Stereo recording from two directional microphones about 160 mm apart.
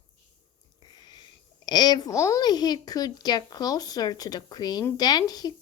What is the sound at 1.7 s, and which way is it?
Speech, 25° left (ahead or behind).